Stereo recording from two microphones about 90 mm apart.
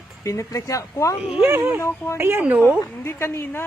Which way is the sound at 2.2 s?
25° right (ahead or behind).